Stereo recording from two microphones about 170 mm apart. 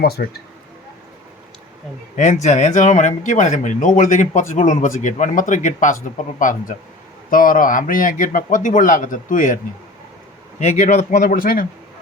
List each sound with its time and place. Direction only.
0.0 s speech: 65° left (ahead or behind)
2.1 s speech: 45° left (ahead or behind)
10.6 s speech: 40° left (ahead or behind)